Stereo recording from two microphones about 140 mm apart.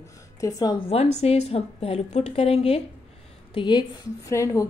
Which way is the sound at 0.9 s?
50° left (ahead or behind).